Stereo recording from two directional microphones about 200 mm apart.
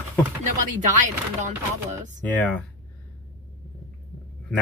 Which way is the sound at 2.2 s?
5° left (ahead or behind).